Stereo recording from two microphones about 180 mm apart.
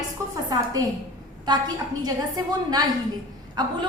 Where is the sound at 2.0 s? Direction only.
20° right (ahead or behind).